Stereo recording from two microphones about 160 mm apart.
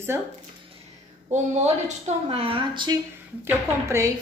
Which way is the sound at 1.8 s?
40° right (ahead or behind).